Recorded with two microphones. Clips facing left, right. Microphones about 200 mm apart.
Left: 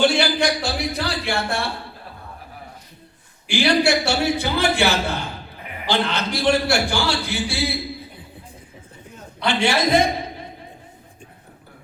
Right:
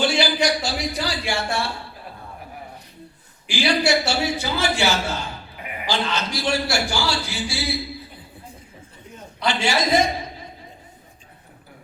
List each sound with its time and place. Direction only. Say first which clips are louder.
0.0 s a sound: left 2 dB; 55° left (ahead or behind)
3.5 s a man's voice: left 2 dB; 60° left (ahead or behind)
9.4 s a man's voice: left 2 dB; 60° left (ahead or behind)